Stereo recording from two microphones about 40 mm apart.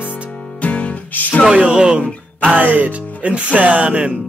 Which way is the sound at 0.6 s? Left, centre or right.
Left.